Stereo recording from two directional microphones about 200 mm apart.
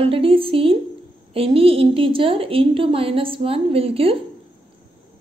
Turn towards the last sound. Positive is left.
turn(degrees=-30)  # may be behind; listen again after turning